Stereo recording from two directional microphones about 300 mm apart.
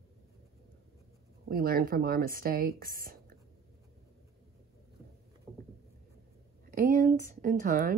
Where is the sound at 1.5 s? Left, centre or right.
Right.